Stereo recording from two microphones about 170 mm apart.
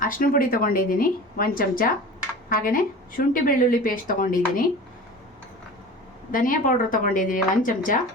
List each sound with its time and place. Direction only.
0.0 s a woman's voice: 55° left (ahead or behind)
6.3 s speech: 55° left (ahead or behind)